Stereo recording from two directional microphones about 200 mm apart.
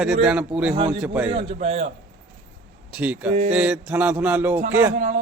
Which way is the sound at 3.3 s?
35° right (ahead or behind).